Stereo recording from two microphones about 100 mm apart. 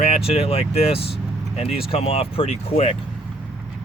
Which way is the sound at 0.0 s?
75° left (ahead or behind).